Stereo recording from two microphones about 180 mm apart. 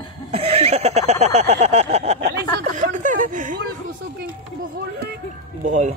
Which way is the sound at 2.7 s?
45° right (ahead or behind).